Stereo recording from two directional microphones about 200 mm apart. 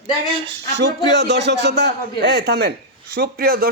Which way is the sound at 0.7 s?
60° right (ahead or behind).